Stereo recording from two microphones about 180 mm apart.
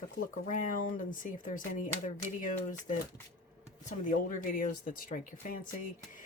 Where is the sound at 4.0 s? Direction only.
45° left (ahead or behind).